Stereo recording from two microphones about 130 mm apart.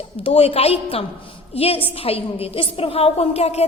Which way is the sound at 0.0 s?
45° left (ahead or behind).